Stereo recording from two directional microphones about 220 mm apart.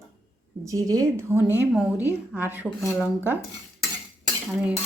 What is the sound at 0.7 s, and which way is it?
Speech, 15° right (ahead or behind).